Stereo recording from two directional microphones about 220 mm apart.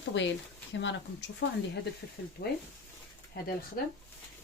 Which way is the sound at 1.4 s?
60° left (ahead or behind).